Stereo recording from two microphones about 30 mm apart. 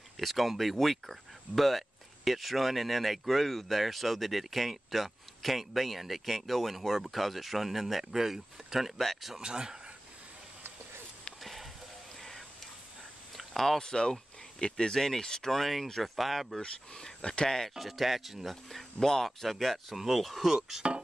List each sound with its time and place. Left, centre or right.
0.2 s speech: centre
8.9 s speech: centre
9.4 s speech: right
11.4 s a sound: centre
13.7 s speech: left
15.0 s speech: centre
15.4 s speech: centre
16.6 s speech: left
17.6 s speech: centre
18.5 s speech: centre
19.9 s speech: centre